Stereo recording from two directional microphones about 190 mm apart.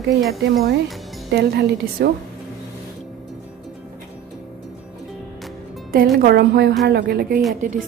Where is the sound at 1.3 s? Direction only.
60° right (ahead or behind).